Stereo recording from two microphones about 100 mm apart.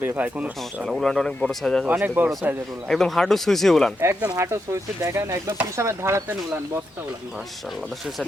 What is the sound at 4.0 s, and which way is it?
Speech, 25° right (ahead or behind).